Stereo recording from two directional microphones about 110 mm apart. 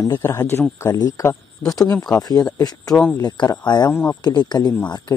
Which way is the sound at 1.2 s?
25° left (ahead or behind).